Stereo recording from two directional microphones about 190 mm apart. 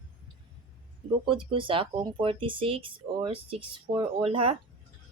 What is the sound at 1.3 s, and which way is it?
Speech, 25° right (ahead or behind).